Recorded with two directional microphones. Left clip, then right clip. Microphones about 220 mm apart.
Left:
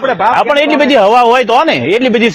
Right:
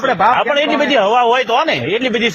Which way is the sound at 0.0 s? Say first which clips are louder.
Left 2 dB; 15° left (ahead or behind).